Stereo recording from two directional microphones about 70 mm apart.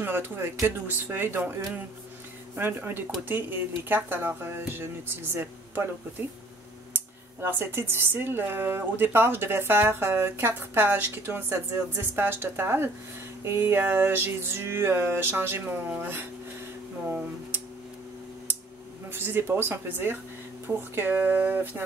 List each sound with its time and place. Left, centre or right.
0.0 s speech: right
6.9 s speech: right
19.0 s speech: right